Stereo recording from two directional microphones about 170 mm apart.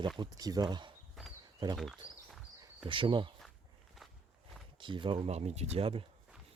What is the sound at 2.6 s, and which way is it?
Speech, 30° right (ahead or behind).